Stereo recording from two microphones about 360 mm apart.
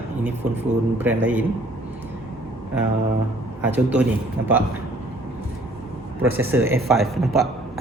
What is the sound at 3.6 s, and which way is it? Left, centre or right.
Speech, centre.